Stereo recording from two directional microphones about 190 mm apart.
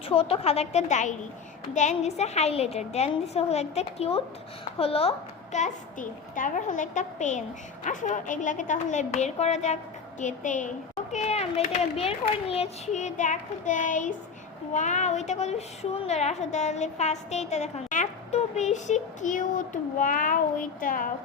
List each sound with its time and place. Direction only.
0.1 s a woman's voice: 30° left (ahead or behind); by 21.1 s 45° left (ahead or behind)